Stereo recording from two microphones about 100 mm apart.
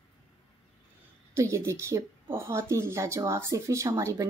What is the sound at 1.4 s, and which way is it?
Speech, 30° right (ahead or behind).